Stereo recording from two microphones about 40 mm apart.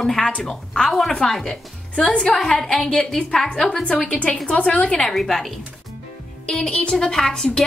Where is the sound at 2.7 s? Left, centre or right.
Centre.